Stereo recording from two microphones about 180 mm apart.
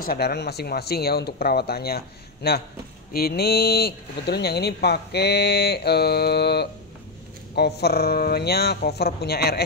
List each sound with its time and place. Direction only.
0.0 s speech: 55° left (ahead or behind)